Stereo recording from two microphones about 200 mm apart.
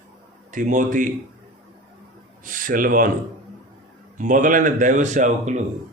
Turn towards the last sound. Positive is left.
turn(degrees=-35)  # may be behind; listen again after turning